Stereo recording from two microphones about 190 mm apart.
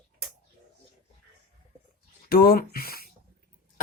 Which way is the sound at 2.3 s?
50° left (ahead or behind).